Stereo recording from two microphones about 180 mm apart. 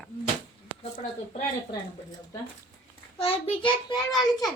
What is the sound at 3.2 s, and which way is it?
Speech, 30° left (ahead or behind).